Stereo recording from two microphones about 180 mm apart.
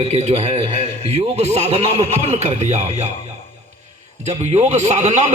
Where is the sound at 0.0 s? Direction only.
35° right (ahead or behind).